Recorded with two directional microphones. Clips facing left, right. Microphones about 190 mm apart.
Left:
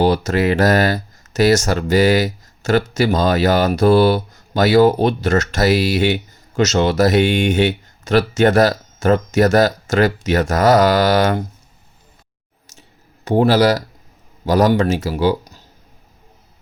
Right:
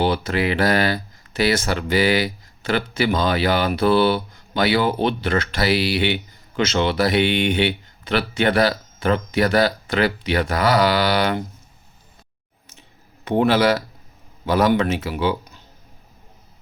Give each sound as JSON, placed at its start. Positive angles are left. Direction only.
{"t": 0.0, "sound": "speech", "side_deg": 40}
{"t": 13.2, "sound": "speech", "side_deg": 40}